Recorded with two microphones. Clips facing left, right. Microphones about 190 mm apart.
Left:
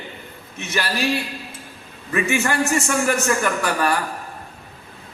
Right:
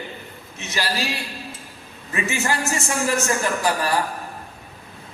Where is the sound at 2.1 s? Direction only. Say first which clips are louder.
Left 3 dB; 60° left (ahead or behind).